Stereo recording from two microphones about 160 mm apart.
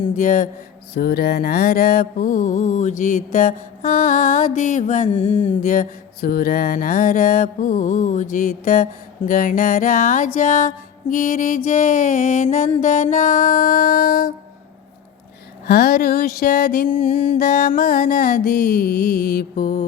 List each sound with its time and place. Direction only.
0.2 s mantra: 55° left (ahead or behind)
0.9 s mantra: 80° left
15.6 s music: 80° left; by 19.8 s 65° left (ahead or behind)